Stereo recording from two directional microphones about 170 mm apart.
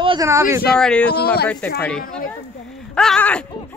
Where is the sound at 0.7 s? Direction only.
5° left (ahead or behind).